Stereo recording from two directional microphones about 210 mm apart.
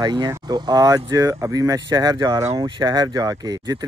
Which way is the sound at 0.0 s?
20° right (ahead or behind).